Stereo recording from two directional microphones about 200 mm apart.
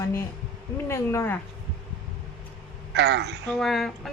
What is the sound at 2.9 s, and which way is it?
Speech, 60° right (ahead or behind).